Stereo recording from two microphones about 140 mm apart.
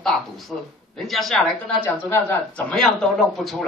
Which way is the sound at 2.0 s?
15° left (ahead or behind).